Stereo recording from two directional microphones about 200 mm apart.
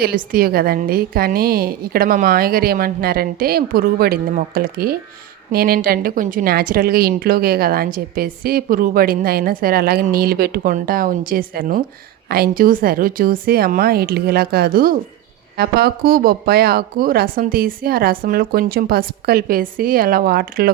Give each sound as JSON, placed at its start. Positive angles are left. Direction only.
{"t": 0.0, "sound": "a woman's voice", "side_deg": -45}